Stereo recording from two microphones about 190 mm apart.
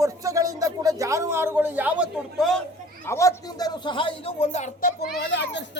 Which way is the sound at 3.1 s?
15° left (ahead or behind).